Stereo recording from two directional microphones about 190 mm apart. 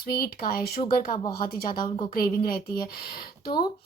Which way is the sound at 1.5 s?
50° left (ahead or behind).